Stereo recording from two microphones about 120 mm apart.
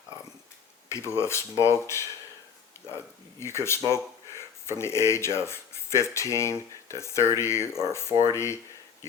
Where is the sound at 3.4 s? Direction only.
20° left (ahead or behind).